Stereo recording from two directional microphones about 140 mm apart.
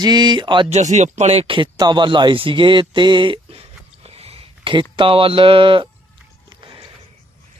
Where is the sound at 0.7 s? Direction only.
55° right (ahead or behind); by 3.6 s 35° right (ahead or behind).